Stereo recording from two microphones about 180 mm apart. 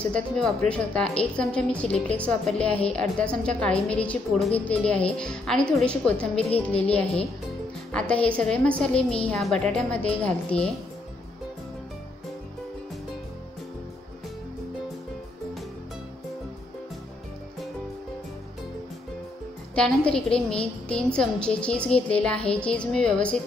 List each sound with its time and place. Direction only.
0.0 s a woman's voice: 5° left (ahead or behind)
19.7 s a woman's voice: 5° left (ahead or behind)